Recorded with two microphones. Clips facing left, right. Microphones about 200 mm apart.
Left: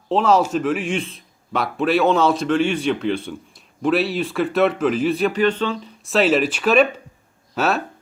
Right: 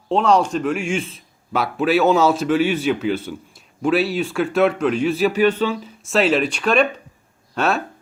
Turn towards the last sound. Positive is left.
turn(degrees=5)  # may be behind; listen again after turning